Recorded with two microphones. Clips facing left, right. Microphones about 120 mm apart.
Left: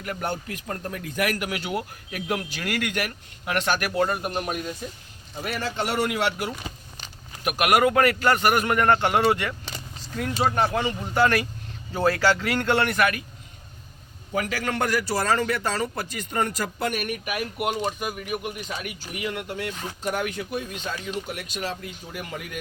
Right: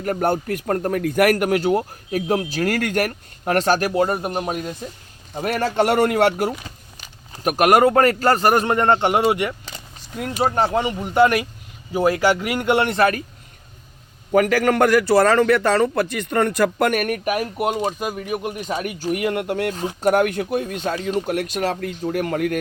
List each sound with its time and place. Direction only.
0.0 s a man's voice: 45° right (ahead or behind); by 4.7 s 30° right (ahead or behind)
5.3 s a man's voice: 50° right (ahead or behind); by 9.6 s 20° right (ahead or behind)
9.7 s a sound: 20° right (ahead or behind)
10.5 s speech: 25° right (ahead or behind)
14.3 s a man's voice: 60° right (ahead or behind)
21.3 s a man's voice: 60° right (ahead or behind)